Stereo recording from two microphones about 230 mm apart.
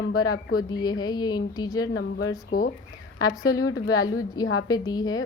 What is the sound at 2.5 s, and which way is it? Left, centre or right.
Speech, left.